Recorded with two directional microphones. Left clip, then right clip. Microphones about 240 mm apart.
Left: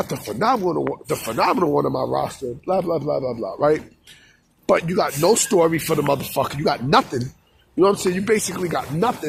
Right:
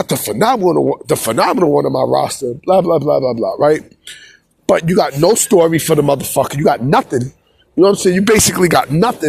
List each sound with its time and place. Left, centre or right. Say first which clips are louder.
0.0 s speech: right 7 dB; right; by 2.0 s centre
2.0 s speech: right 8 dB; right
8.2 s speech: right 9 dB; right